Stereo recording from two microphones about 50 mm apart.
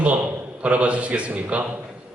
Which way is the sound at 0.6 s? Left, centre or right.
Right.